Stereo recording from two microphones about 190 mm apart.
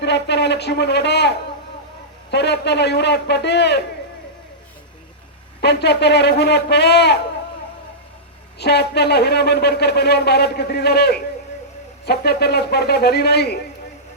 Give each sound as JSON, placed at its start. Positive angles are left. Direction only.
{"t": 0.0, "sound": "a sound", "side_deg": 65}
{"t": 2.3, "sound": "speech", "side_deg": 65}
{"t": 5.5, "sound": "speech", "side_deg": 60}
{"t": 8.5, "sound": "speech", "side_deg": 60}